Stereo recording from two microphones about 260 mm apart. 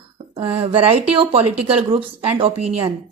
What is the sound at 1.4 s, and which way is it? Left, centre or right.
Speech, right.